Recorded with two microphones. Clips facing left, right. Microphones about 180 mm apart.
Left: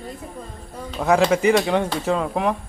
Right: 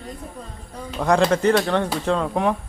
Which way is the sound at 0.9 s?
5° left (ahead or behind).